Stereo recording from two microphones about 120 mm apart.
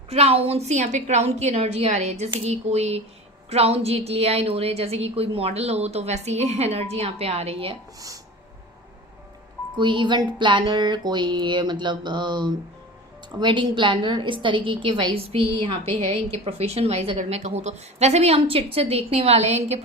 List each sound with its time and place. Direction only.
0.1 s a woman's voice: 55° right (ahead or behind)
7.9 s speech: 30° right (ahead or behind)
9.7 s a sound: 40° right (ahead or behind)
13.4 s a woman's voice: 40° right (ahead or behind); by 19.8 s 65° right (ahead or behind)